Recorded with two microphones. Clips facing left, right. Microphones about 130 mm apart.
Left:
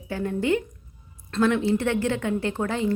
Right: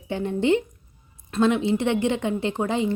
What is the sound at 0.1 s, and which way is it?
A woman's voice, 20° right (ahead or behind).